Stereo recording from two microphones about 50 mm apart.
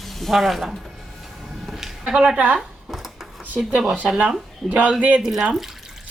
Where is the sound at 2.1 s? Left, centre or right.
Centre.